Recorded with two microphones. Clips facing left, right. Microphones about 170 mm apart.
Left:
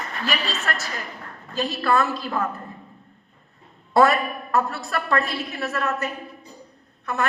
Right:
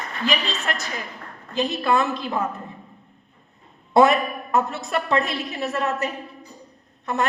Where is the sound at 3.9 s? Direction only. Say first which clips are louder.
Right 2 dB; 20° right (ahead or behind).